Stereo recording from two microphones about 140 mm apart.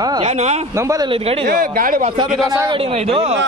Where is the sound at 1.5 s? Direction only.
90° right.